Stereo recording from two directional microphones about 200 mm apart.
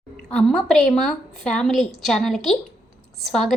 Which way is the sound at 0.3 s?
5° left (ahead or behind).